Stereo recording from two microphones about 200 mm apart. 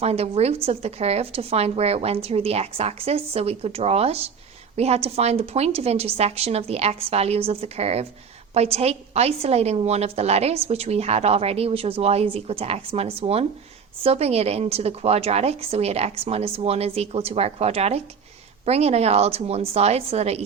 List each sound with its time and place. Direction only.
0.0 s a woman's voice: 30° right (ahead or behind)